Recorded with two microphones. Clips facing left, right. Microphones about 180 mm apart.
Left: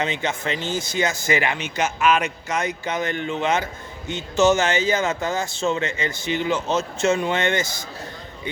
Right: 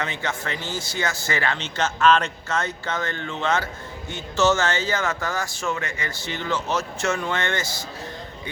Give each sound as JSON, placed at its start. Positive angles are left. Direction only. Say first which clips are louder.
{"t": 0.0, "sound": "speech", "louder": "left 4 dB", "side_deg": 20}